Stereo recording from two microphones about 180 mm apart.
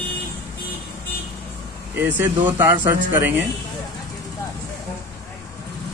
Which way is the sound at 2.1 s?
10° right (ahead or behind).